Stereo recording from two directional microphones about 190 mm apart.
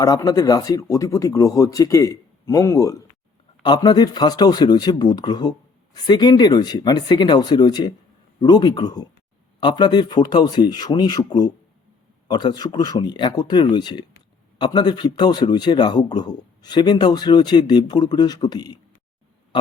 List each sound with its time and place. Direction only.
0.0 s speech: 20° left (ahead or behind)